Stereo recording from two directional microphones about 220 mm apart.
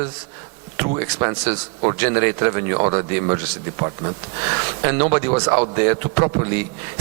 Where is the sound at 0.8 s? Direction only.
15° right (ahead or behind).